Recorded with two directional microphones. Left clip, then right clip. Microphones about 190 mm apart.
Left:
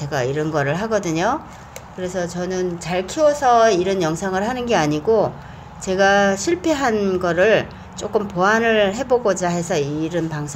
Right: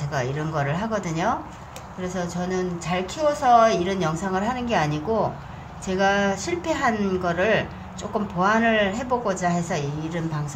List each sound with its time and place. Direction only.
0.0 s speech: 35° left (ahead or behind)